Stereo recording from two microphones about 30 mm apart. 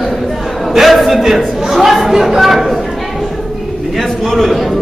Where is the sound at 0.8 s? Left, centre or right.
Centre.